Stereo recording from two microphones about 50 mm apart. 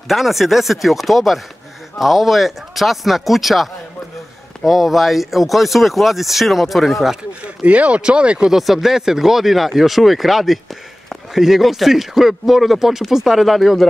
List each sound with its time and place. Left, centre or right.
0.1 s speech: centre
4.6 s speech: centre
7.6 s speech: right
8.5 s speech: centre